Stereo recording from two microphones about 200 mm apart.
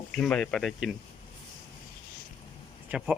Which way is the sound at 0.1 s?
5° left (ahead or behind).